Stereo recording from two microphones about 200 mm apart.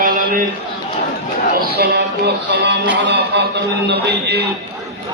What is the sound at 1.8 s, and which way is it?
Music, 55° right (ahead or behind).